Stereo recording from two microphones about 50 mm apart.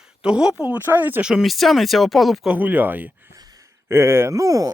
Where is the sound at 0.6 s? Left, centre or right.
Right.